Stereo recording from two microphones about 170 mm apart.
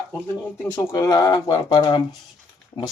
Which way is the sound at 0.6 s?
15° left (ahead or behind).